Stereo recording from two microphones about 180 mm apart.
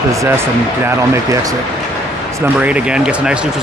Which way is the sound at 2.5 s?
5° right (ahead or behind).